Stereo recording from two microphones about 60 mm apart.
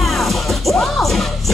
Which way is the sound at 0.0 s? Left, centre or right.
Centre.